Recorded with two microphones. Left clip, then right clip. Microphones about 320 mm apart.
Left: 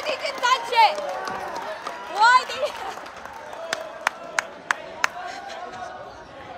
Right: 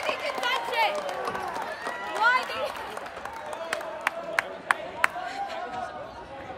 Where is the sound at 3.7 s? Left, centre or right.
Centre.